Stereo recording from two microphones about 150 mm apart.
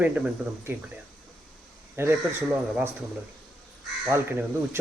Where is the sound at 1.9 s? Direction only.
15° right (ahead or behind).